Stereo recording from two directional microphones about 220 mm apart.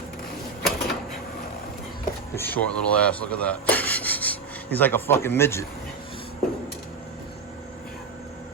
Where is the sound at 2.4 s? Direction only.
10° left (ahead or behind).